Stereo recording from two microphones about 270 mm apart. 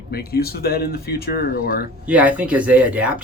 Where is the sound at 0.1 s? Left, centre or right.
Left.